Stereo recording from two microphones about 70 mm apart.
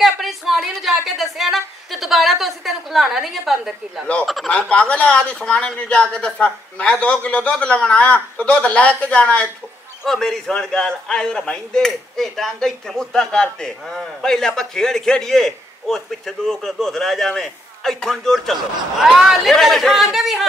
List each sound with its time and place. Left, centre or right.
0.0 s a sound: centre
3.6 s speech: centre
4.5 s speech: centre
10.0 s speech: centre